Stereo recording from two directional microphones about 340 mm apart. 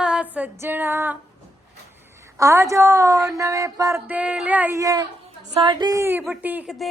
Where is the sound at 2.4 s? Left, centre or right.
Centre.